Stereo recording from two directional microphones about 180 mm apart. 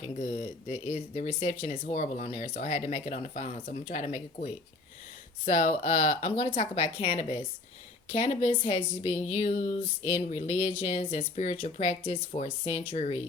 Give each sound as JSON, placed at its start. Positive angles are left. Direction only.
{"t": 0.2, "sound": "speech", "side_deg": 35}